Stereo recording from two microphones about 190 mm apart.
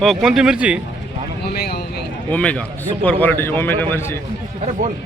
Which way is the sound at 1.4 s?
55° left (ahead or behind).